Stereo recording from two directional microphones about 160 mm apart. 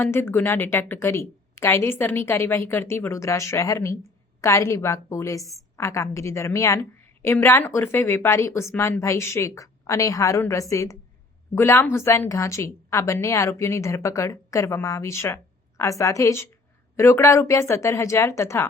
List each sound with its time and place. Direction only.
0.0 s a woman's voice: 15° left (ahead or behind)